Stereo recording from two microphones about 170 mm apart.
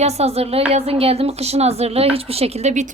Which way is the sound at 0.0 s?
40° right (ahead or behind).